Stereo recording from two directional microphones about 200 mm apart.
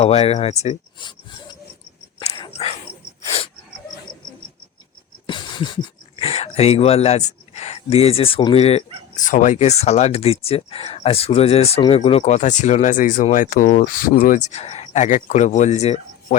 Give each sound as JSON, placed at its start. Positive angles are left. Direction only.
{"t": 0.0, "sound": "speech", "side_deg": 30}
{"t": 5.2, "sound": "speech", "side_deg": 25}